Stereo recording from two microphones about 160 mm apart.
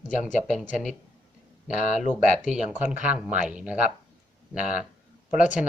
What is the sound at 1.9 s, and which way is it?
Speech, 55° left (ahead or behind).